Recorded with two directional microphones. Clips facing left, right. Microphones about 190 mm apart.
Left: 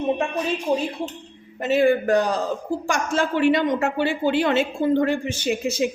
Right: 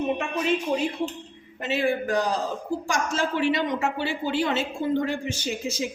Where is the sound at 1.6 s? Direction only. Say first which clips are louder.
Left 7 dB; 50° left (ahead or behind).